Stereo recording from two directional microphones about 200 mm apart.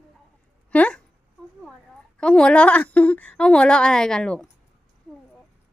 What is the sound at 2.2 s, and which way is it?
A woman's voice, 5° left (ahead or behind).